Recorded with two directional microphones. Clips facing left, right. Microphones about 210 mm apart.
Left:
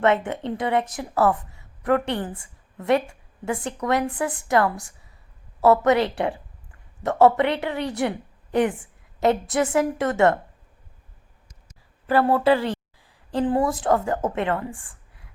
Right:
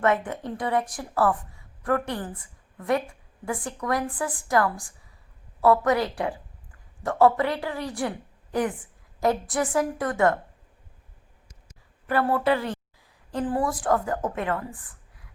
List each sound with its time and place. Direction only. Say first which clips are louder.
0.0 s a woman's voice: left 3 dB; 25° left (ahead or behind)
12.0 s a woman's voice: left 4 dB; 30° left (ahead or behind)